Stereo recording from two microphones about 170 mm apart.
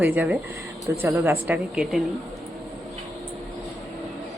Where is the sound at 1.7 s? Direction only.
Centre (ahead or behind).